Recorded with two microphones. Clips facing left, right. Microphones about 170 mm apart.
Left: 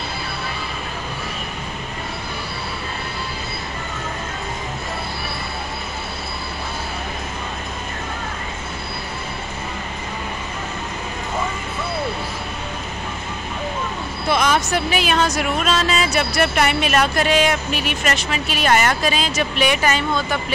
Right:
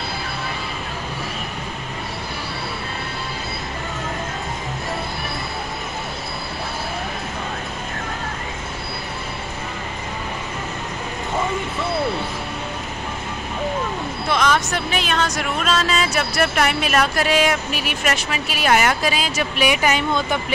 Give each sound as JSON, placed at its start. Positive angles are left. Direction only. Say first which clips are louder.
{"t": 14.3, "sound": "speech", "louder": "left 1 dB", "side_deg": 5}